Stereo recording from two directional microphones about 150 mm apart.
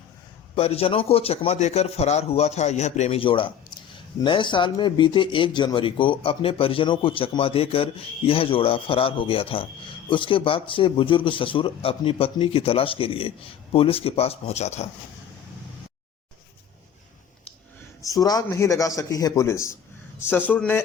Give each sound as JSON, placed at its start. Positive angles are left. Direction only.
{"t": 0.5, "sound": "a man's voice", "side_deg": 40}
{"t": 18.0, "sound": "a man's voice", "side_deg": 25}